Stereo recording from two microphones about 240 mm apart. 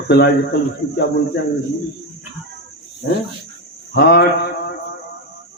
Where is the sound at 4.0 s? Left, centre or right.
Left.